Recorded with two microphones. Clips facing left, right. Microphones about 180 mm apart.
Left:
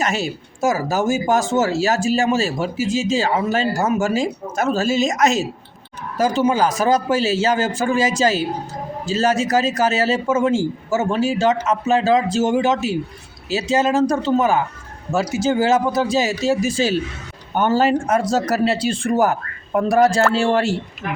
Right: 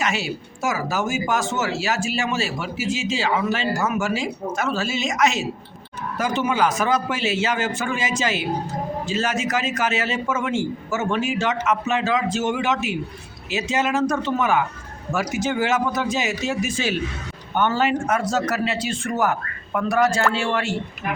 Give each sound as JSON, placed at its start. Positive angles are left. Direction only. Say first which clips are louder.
{"t": 0.0, "sound": "speech", "louder": "left 3 dB", "side_deg": 40}